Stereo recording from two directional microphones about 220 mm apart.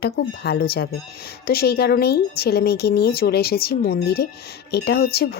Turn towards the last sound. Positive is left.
turn(degrees=45)  # may be behind; listen again after turning